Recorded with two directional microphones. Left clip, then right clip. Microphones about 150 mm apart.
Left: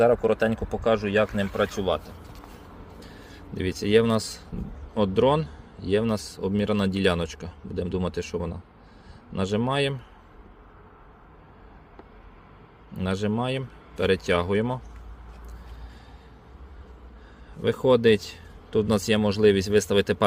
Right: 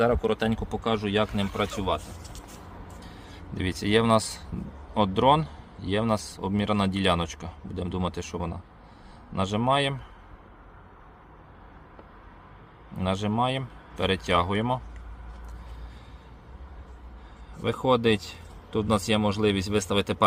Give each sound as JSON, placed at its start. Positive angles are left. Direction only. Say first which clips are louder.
{"t": 0.0, "sound": "speech", "louder": "left 4 dB", "side_deg": -5}
{"t": 3.0, "sound": "a sound", "louder": "even", "side_deg": 15}
{"t": 3.5, "sound": "speech", "louder": "left 3 dB", "side_deg": 0}
{"t": 13.0, "sound": "speech", "louder": "right 1 dB", "side_deg": 10}
{"t": 17.6, "sound": "speech", "louder": "left 3 dB", "side_deg": 15}